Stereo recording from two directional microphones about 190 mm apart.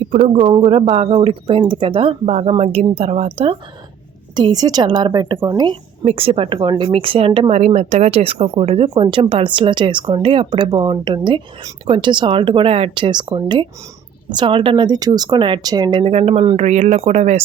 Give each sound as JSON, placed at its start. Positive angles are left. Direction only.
{"t": 0.1, "sound": "a woman's voice", "side_deg": -35}